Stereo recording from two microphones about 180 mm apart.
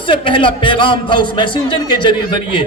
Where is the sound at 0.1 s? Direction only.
30° left (ahead or behind).